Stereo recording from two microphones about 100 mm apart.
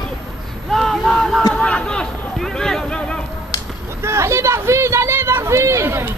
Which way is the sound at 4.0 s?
30° right (ahead or behind).